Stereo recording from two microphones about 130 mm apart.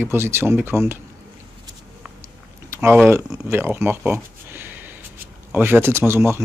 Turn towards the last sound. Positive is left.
turn(degrees=-20)  # may be behind; listen again after turning